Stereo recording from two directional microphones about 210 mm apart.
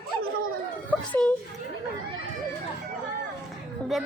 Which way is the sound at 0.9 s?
5° left (ahead or behind).